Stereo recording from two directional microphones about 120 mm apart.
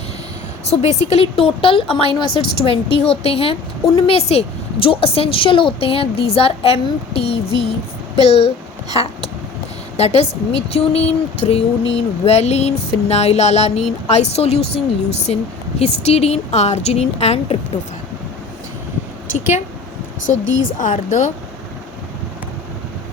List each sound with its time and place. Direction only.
0.7 s a woman's voice: 70° left (ahead or behind)
10.0 s speech: 60° left (ahead or behind)
20.2 s a woman's voice: 90° left